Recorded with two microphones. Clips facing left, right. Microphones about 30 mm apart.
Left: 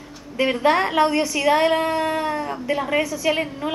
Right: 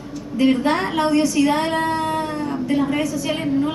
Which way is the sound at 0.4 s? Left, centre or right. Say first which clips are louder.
Right 1 dB; centre.